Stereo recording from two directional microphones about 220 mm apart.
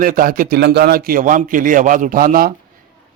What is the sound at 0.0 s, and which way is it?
A man's voice, 40° right (ahead or behind).